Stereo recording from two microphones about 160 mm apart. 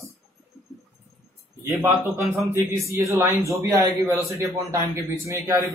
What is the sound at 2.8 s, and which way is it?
A man's voice, 15° right (ahead or behind).